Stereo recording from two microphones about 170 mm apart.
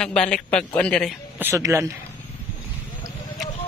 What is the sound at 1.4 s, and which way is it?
Speech, 15° right (ahead or behind).